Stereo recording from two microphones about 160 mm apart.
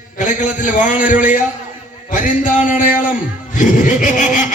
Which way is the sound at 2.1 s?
55° left (ahead or behind).